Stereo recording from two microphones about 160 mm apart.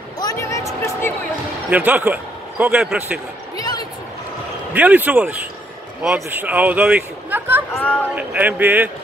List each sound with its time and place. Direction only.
0.2 s a sound: 20° left (ahead or behind)
1.7 s a man's voice: 10° right (ahead or behind)
3.5 s a sound: 25° left (ahead or behind)
4.7 s speech: 10° right (ahead or behind)
7.7 s speech: 10° left (ahead or behind)
8.3 s speech: 10° right (ahead or behind)